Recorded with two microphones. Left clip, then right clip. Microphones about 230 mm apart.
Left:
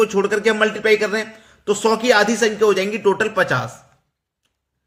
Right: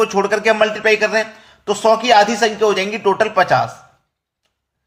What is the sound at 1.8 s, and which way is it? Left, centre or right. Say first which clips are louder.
Speech: right 4 dB; centre.